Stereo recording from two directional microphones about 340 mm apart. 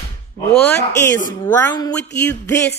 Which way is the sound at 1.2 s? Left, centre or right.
Centre.